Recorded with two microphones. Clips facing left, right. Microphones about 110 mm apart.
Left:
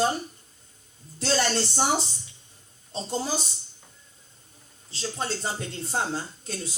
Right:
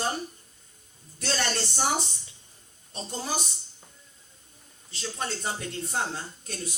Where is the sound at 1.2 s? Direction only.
30° left (ahead or behind).